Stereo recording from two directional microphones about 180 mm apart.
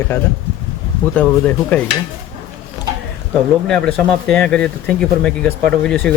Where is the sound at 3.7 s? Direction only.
5° left (ahead or behind).